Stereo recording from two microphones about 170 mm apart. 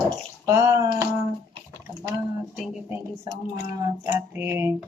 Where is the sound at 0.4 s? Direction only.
15° right (ahead or behind).